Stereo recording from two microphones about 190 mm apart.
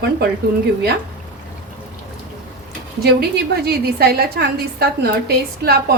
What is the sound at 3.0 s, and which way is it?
A woman's voice, 55° right (ahead or behind).